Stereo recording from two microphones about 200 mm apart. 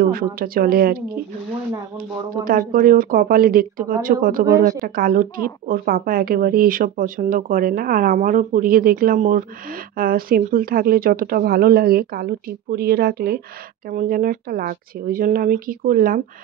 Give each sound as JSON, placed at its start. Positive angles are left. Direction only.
{"t": 0.0, "sound": "a woman's voice", "side_deg": -45}
{"t": 2.4, "sound": "a woman's voice", "side_deg": -45}